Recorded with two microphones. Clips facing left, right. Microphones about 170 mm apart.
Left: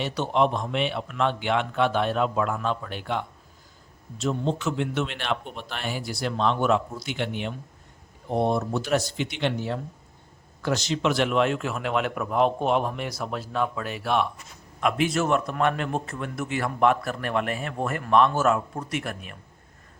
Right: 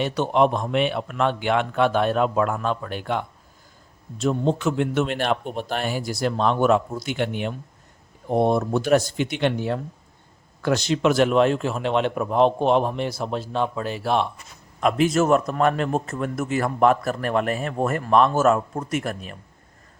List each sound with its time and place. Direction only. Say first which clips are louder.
0.0 s a man's voice: right 4 dB; 55° right (ahead or behind); by 19.4 s 35° right (ahead or behind)